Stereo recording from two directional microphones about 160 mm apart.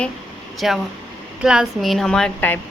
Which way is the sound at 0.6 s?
Centre (ahead or behind).